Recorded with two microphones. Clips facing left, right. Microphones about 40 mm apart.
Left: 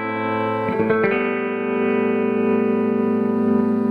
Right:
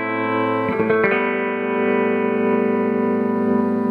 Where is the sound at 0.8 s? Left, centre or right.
Centre.